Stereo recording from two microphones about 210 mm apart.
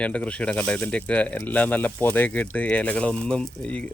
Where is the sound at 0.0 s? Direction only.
5° left (ahead or behind).